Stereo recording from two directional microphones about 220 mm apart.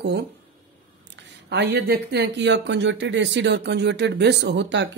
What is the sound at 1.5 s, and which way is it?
Speech, 50° right (ahead or behind).